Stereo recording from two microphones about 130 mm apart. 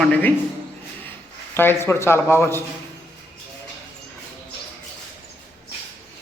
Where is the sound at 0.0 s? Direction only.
10° left (ahead or behind).